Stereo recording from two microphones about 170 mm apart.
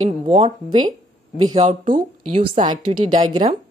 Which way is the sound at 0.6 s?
25° right (ahead or behind).